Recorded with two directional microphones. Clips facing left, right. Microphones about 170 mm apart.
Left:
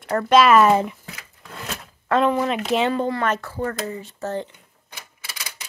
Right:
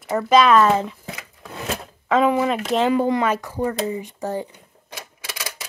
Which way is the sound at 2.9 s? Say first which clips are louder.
Right 3 dB; 10° right (ahead or behind).